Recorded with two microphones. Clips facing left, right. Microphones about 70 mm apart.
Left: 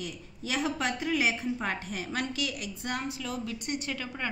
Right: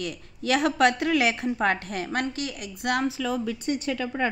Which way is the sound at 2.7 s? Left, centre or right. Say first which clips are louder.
Right 12 dB; right.